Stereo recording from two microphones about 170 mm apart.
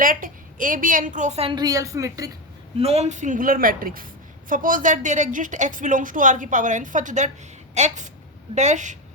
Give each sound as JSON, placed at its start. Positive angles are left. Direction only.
{"t": 0.0, "sound": "a woman's voice", "side_deg": -55}
{"t": 1.5, "sound": "a woman's voice", "side_deg": -20}
{"t": 2.7, "sound": "a woman's voice", "side_deg": -35}